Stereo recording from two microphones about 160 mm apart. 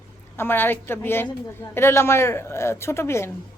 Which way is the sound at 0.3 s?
15° left (ahead or behind).